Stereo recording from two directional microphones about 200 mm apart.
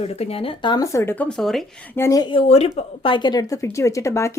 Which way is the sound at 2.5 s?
30° left (ahead or behind).